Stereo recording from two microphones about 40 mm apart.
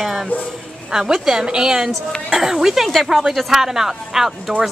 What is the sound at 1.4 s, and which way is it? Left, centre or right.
A woman's voice, right.